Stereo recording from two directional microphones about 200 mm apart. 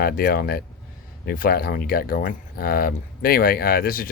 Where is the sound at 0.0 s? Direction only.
50° left (ahead or behind).